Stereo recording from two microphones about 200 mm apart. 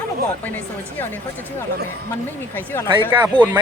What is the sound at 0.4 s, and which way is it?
Speech, 10° left (ahead or behind).